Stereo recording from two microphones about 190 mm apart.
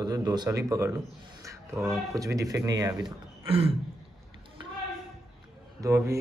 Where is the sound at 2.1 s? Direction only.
20° right (ahead or behind).